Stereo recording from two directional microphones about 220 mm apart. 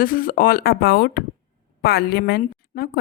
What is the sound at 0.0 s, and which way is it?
A woman's voice, 40° left (ahead or behind).